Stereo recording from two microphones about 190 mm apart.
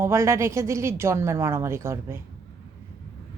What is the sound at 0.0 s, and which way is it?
A woman's voice, 15° right (ahead or behind).